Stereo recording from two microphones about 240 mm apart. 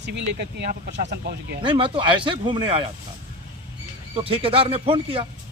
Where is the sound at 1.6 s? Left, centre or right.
Right.